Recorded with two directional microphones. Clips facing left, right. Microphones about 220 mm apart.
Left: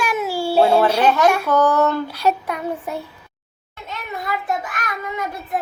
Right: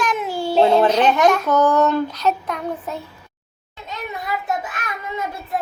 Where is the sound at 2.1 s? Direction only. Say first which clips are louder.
Left 1 dB; 10° left (ahead or behind).